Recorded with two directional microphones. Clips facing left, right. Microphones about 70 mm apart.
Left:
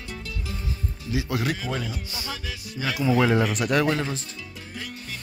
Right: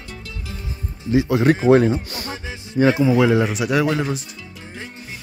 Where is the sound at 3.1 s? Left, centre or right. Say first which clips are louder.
Right 5 dB; centre.